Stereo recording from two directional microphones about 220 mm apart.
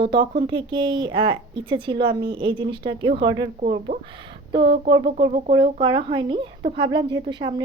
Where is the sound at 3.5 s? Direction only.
35° right (ahead or behind).